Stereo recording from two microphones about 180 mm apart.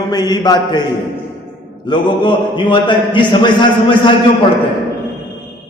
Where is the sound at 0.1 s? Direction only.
20° left (ahead or behind).